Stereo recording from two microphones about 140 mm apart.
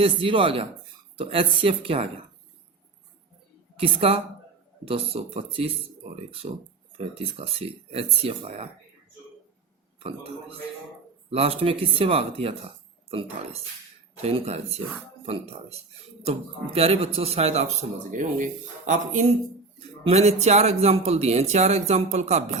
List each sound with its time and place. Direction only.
0.0 s speech: 40° right (ahead or behind)
3.8 s speech: 40° right (ahead or behind)
10.0 s speech: 40° right (ahead or behind)
16.2 s speech: 45° right (ahead or behind)
18.1 s speech: 65° right (ahead or behind)
20.1 s speech: 50° right (ahead or behind)